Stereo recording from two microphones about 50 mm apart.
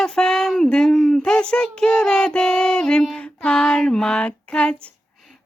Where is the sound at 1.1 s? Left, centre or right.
Centre.